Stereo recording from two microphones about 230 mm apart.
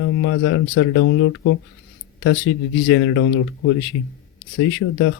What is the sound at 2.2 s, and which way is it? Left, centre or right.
Speech, left.